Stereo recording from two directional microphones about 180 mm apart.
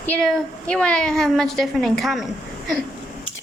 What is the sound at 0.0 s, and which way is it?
Speech, 5° left (ahead or behind).